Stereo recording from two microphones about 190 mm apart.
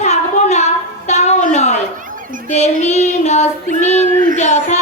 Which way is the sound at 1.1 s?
35° left (ahead or behind).